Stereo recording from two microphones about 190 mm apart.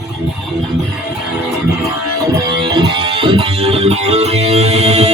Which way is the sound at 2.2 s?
20° right (ahead or behind).